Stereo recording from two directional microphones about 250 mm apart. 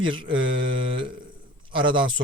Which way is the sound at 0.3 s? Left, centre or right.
Right.